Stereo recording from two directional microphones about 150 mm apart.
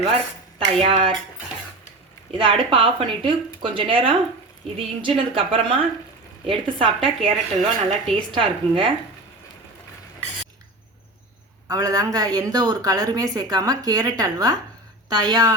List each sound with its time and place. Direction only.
0.8 s speech: 35° right (ahead or behind)
2.3 s speech: 35° right (ahead or behind)
11.7 s a woman's voice: 25° right (ahead or behind)